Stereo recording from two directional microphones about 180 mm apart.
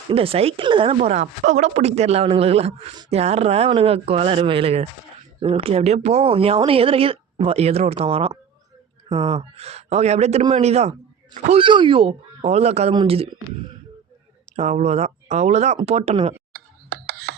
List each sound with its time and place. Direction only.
0.1 s speech: 30° right (ahead or behind)
14.5 s speech: 40° right (ahead or behind)
16.5 s a sound: 60° right (ahead or behind)